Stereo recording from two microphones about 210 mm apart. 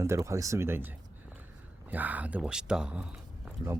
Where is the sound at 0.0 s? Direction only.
15° right (ahead or behind).